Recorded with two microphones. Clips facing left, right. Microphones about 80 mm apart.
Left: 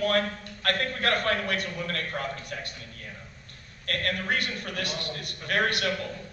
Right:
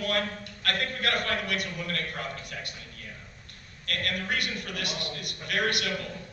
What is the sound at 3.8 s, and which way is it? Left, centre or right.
A man's voice, left.